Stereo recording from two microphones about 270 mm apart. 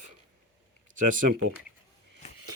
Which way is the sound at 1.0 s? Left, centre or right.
Right.